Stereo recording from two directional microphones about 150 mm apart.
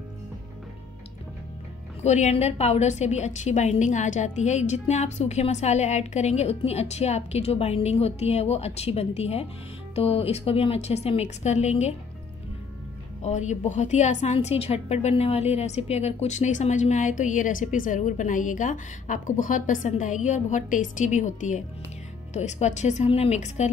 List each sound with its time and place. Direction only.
2.0 s a woman's voice: 50° left (ahead or behind)
13.2 s a woman's voice: 50° left (ahead or behind)